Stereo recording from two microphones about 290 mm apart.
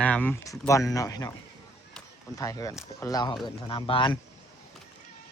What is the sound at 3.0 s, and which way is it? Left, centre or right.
Speech, centre.